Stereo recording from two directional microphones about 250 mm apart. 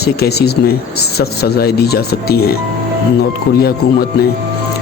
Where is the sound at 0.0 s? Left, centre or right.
Left.